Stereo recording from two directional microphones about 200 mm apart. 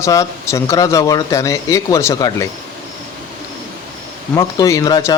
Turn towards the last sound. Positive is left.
turn(degrees=15)  # may be behind; listen again after turning